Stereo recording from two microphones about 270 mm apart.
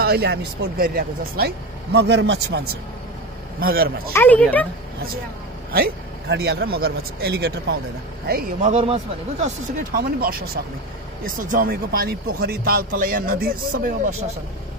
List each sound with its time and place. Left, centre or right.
0.0 s speech: right
4.1 s speech: centre
5.7 s speech: right
9.9 s speech: right